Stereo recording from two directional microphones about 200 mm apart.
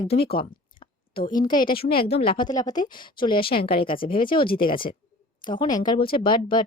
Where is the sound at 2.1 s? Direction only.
30° left (ahead or behind).